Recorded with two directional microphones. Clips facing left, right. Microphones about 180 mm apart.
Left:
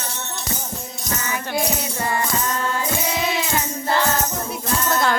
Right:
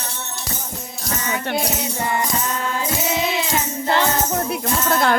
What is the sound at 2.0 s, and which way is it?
Music, 20° right (ahead or behind).